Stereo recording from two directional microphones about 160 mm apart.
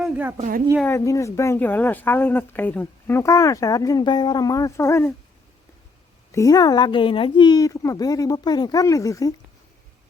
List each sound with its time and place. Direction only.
0.0 s a woman's voice: 10° right (ahead or behind)
0.9 s speech: 20° left (ahead or behind)
6.3 s speech: 20° left (ahead or behind)